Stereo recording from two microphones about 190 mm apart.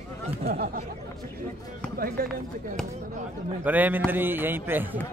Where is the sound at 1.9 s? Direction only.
50° right (ahead or behind).